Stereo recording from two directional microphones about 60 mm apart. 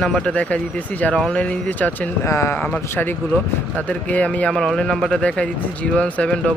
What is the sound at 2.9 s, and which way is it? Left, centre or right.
Speech, left.